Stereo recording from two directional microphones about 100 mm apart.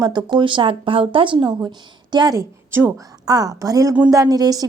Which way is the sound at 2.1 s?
45° right (ahead or behind).